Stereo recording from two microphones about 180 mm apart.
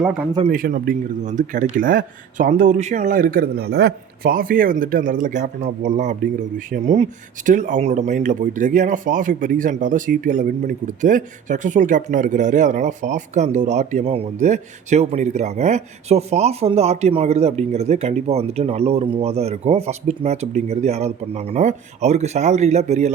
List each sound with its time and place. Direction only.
0.5 s speech: 50° right (ahead or behind)
6.7 s speech: 40° right (ahead or behind)